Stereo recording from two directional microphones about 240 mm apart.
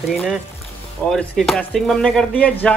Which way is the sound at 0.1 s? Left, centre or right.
Centre.